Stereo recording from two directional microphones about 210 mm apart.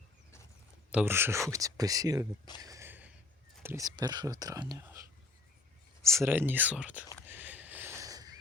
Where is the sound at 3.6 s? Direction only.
15° right (ahead or behind).